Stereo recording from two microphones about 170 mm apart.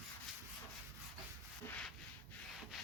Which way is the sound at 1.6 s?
10° left (ahead or behind).